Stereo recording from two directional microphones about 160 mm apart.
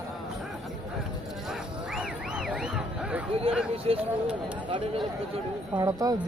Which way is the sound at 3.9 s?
35° right (ahead or behind).